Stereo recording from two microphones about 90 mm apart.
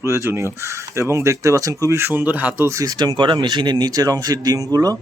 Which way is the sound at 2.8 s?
45° right (ahead or behind).